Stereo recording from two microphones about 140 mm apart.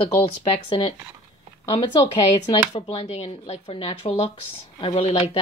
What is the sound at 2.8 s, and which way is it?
Speech, 50° left (ahead or behind).